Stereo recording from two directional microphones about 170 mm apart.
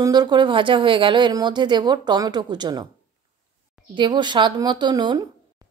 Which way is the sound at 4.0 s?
25° right (ahead or behind).